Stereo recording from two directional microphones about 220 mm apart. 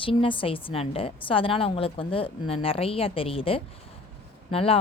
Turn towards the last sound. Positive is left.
turn(degrees=25)  # may be behind; listen again after turning